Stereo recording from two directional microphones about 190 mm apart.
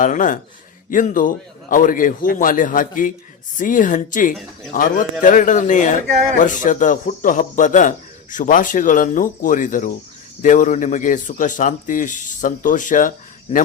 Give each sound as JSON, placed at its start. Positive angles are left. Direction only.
{"t": 0.0, "sound": "a man's voice", "side_deg": 45}